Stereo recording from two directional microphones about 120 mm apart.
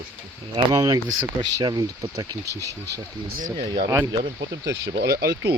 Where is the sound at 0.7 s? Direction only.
30° right (ahead or behind).